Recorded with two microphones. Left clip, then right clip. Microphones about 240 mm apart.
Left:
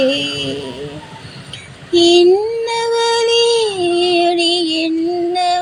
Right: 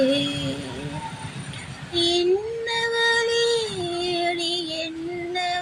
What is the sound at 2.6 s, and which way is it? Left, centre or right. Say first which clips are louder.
Child singing: left 2 dB; centre.